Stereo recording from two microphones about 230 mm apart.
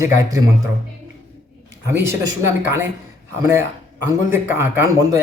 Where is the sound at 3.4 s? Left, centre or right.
Centre.